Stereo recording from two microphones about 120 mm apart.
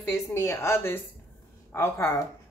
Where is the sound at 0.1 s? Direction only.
20° left (ahead or behind).